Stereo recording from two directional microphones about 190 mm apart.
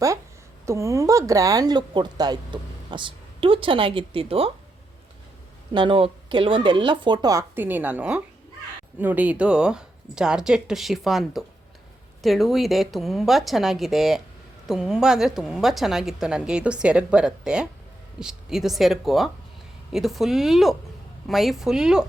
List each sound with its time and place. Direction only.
0.6 s speech: 15° right (ahead or behind)
5.7 s speech: 25° right (ahead or behind); by 22.0 s 5° right (ahead or behind)